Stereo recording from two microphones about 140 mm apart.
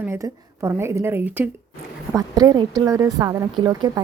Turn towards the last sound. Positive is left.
turn(degrees=-25)  # may be behind; listen again after turning